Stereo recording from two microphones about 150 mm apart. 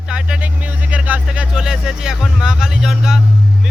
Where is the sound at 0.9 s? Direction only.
10° right (ahead or behind).